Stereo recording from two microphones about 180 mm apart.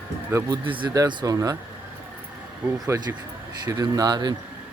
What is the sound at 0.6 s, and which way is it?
Speech, 30° right (ahead or behind).